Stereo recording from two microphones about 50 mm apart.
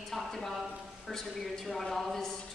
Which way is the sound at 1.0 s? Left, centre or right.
Centre.